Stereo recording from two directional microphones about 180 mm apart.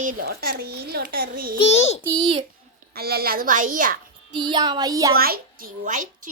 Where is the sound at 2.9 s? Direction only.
60° right (ahead or behind).